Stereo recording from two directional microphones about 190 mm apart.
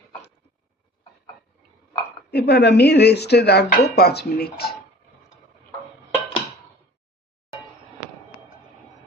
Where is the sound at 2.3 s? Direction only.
60° left (ahead or behind).